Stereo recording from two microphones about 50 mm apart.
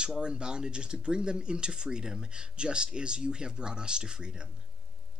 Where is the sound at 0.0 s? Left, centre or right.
Centre.